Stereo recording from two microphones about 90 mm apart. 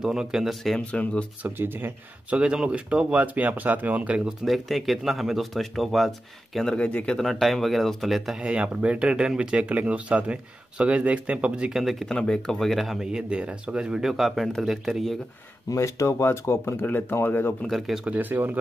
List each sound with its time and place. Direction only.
0.0 s speech: 5° right (ahead or behind)
0.7 s speech: 15° left (ahead or behind)
1.4 s speech: 25° right (ahead or behind)
4.5 s speech: centre (ahead or behind)
7.2 s speech: centre (ahead or behind)
8.4 s speech: 10° right (ahead or behind)
11.8 s speech: centre (ahead or behind)
15.7 s speech: 35° left (ahead or behind)
17.6 s speech: centre (ahead or behind)
18.1 s speech: 20° right (ahead or behind)